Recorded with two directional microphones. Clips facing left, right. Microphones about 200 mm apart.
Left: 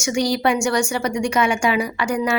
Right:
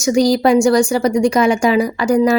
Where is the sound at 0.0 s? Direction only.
35° right (ahead or behind).